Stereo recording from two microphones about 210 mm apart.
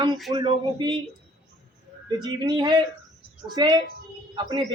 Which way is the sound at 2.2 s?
20° right (ahead or behind).